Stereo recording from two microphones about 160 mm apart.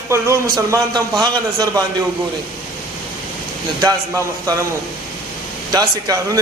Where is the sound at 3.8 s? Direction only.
20° right (ahead or behind).